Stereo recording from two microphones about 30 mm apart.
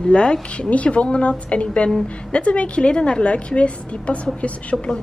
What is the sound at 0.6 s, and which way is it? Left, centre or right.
A woman's voice, left.